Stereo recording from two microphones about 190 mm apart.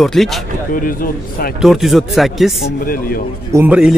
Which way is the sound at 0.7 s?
45° left (ahead or behind).